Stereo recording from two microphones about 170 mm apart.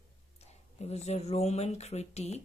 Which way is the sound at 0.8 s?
40° left (ahead or behind).